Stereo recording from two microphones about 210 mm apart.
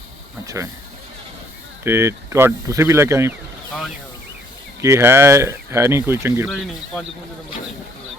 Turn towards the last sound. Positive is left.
turn(degrees=0)  # may be behind; listen again after turning